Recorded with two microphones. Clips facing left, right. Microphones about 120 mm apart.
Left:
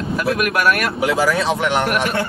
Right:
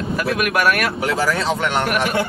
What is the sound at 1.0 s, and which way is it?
Speech, 15° left (ahead or behind).